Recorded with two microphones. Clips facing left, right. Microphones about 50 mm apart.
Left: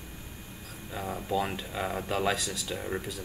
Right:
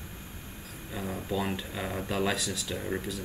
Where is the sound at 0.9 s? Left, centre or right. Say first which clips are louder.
Left 2 dB; centre.